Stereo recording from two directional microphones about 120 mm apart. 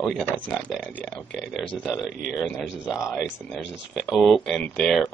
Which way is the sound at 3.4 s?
Centre (ahead or behind).